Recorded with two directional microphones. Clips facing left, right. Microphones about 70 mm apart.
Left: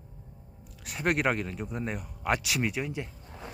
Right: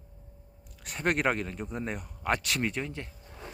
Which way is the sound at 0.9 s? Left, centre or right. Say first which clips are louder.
Even; centre.